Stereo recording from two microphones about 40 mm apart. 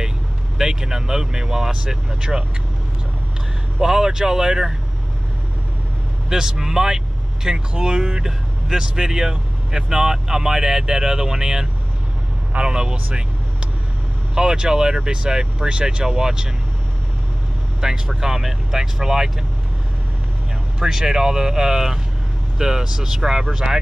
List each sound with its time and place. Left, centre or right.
0.6 s speech: centre
3.8 s speech: centre
6.2 s speech: centre
14.3 s speech: centre
17.7 s speech: centre
20.8 s speech: centre